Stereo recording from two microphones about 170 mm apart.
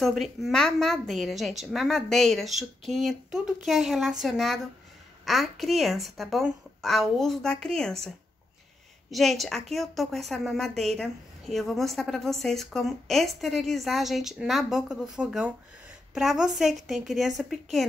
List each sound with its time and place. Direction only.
0.0 s speech: centre (ahead or behind)
9.1 s speech: centre (ahead or behind)